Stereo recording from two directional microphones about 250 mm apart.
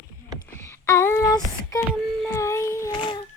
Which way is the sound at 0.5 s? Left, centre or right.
Centre.